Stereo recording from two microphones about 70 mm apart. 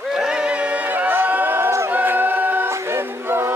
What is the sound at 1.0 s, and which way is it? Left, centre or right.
A capella, right.